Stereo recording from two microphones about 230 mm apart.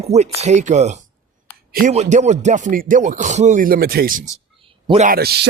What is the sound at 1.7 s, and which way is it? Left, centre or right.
Rapping, right.